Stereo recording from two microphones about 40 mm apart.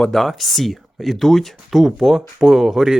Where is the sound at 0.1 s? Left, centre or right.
Centre.